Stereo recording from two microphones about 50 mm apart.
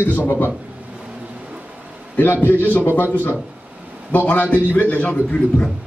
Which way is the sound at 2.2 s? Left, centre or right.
Left.